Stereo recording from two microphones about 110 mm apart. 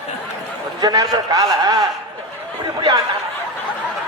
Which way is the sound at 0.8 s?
35° right (ahead or behind).